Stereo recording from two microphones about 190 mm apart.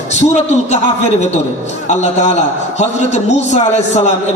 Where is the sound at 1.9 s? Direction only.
40° left (ahead or behind).